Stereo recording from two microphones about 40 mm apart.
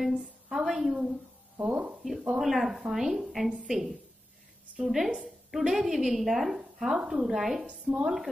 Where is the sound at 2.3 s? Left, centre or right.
Centre.